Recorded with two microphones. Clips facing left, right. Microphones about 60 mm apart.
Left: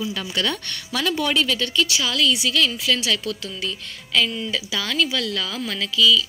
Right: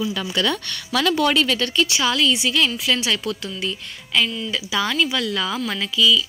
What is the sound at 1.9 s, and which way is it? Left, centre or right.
A woman's voice, right.